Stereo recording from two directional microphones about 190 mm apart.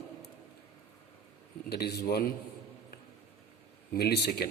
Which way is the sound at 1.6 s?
55° left (ahead or behind).